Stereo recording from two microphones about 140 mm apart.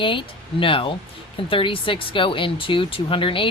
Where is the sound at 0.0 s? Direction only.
35° left (ahead or behind).